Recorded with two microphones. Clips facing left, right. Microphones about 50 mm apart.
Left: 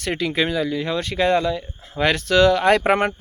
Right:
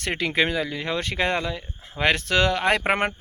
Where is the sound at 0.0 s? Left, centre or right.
Right.